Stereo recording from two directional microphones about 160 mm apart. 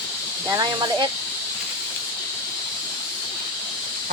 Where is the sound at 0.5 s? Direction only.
25° right (ahead or behind).